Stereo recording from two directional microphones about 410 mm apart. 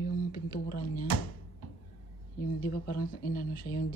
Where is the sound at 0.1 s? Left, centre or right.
Left.